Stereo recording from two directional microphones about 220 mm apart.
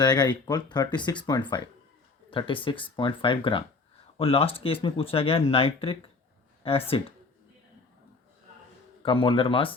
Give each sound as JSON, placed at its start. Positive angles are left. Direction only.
{"t": 0.0, "sound": "speech", "side_deg": 20}
{"t": 9.0, "sound": "speech", "side_deg": 25}